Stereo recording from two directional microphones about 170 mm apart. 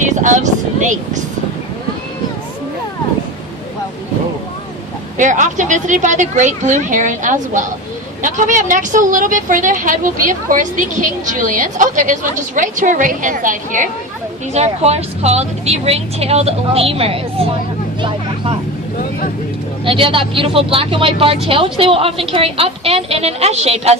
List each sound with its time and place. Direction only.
0.0 s a woman's voice: 45° right (ahead or behind)
5.1 s a woman's voice: 45° right (ahead or behind)
14.5 s a woman's voice: 40° right (ahead or behind)
19.8 s a woman's voice: 30° right (ahead or behind)